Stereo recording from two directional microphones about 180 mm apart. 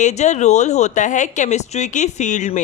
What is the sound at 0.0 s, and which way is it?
A woman's voice, 40° left (ahead or behind).